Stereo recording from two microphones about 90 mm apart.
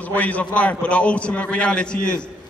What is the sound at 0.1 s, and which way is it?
A man's voice, 15° left (ahead or behind).